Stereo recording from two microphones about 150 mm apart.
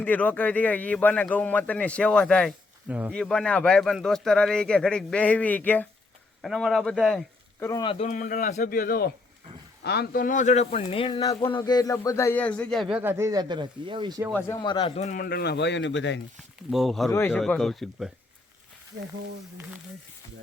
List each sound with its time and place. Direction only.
0.0 s a man's voice: 10° left (ahead or behind)
7.8 s speech: 35° left (ahead or behind)
8.0 s a man's voice: 65° left (ahead or behind); by 12.9 s 5° left (ahead or behind)
12.9 s speech: 15° right (ahead or behind); by 14.2 s 30° right (ahead or behind)
14.3 s a man's voice: 15° left (ahead or behind)
14.6 s speech: 35° left (ahead or behind)
15.2 s speech: 90° left
16.6 s speech: centre (ahead or behind)
17.1 s speech: 20° left (ahead or behind)
17.3 s speech: 5° left (ahead or behind)